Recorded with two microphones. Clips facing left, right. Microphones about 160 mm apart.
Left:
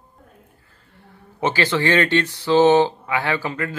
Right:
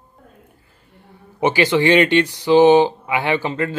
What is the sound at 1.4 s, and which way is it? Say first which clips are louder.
Speech: right 4 dB; 15° right (ahead or behind).